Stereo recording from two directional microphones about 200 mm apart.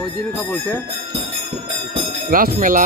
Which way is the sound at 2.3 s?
45° right (ahead or behind).